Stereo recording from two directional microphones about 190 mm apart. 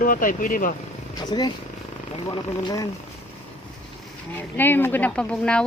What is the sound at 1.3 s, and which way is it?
Speech, 25° left (ahead or behind).